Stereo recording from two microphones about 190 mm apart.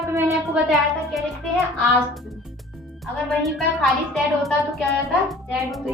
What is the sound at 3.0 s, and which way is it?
A woman's voice, centre (ahead or behind).